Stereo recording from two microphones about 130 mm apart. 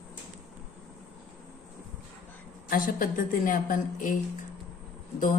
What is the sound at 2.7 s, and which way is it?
A woman's voice, 90° left.